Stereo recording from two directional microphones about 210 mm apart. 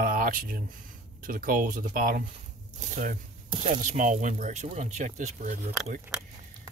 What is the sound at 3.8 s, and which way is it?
Speech, 35° right (ahead or behind).